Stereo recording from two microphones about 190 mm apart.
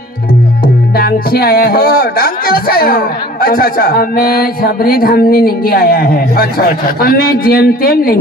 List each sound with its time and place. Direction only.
0.9 s speech: 55° left (ahead or behind)